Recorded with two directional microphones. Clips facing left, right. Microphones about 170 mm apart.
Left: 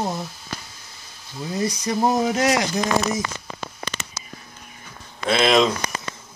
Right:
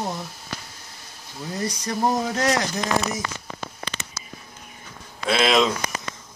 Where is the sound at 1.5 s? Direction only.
10° left (ahead or behind).